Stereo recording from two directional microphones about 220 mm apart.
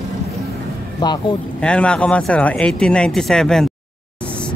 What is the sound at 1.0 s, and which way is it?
Speech, 20° left (ahead or behind).